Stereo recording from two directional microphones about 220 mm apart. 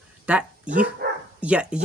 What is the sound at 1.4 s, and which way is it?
Speech, 5° right (ahead or behind).